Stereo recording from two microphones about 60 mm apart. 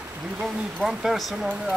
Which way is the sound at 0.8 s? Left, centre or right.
Centre.